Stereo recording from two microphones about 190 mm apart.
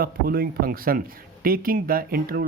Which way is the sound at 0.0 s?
50° right (ahead or behind).